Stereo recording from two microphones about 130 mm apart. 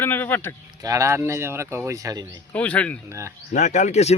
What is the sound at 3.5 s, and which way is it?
Speech, 65° left (ahead or behind).